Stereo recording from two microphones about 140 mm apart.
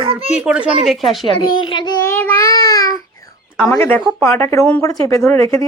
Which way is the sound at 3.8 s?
15° left (ahead or behind).